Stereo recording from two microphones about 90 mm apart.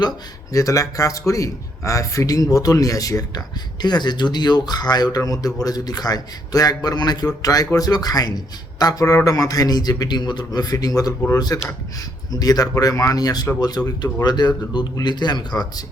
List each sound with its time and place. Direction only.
0.5 s speech: 40° left (ahead or behind)